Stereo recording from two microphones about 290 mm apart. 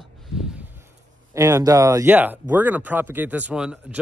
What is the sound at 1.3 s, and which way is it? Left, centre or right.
Speech, centre.